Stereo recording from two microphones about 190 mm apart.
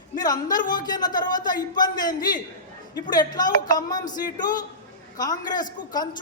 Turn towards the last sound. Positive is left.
turn(degrees=20)  # may be behind; listen again after turning